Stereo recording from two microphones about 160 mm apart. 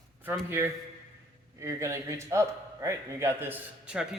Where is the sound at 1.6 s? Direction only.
20° right (ahead or behind).